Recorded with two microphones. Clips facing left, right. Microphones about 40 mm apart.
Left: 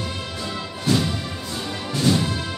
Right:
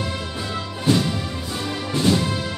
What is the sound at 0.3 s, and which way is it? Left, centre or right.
Music, centre.